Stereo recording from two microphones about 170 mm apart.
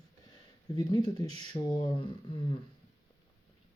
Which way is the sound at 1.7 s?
25° left (ahead or behind).